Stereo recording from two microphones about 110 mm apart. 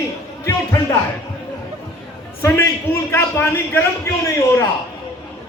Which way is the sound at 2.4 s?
25° left (ahead or behind).